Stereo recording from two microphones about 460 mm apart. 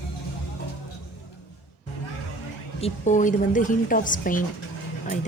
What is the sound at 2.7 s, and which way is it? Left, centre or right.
A woman's voice, centre.